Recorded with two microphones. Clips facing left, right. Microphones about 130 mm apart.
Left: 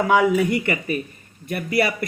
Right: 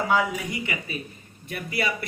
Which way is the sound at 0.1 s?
60° left (ahead or behind).